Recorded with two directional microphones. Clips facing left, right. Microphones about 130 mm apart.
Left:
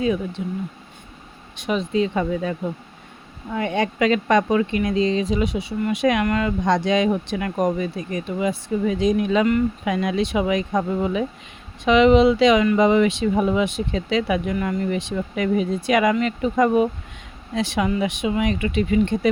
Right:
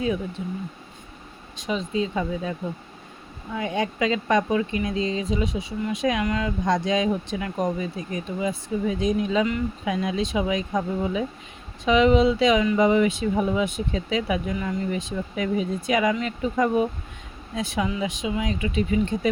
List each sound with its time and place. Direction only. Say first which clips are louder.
0.4 s speech: left 3 dB; 90° left
1.5 s speech: left 4 dB; 65° left (ahead or behind)